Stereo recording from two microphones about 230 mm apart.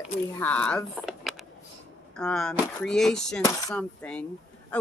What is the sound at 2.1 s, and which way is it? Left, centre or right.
Speech, centre.